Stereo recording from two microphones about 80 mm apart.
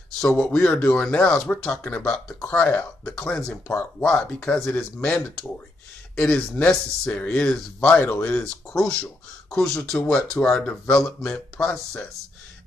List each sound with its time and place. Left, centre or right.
0.4 s speech: centre
11.3 s speech: centre